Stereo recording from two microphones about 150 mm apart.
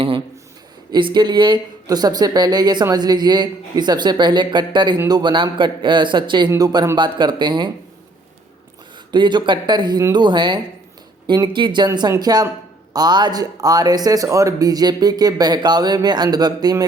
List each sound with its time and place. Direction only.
0.9 s speech: 30° right (ahead or behind)
6.5 s speech: 20° right (ahead or behind)
9.1 s speech: 30° right (ahead or behind)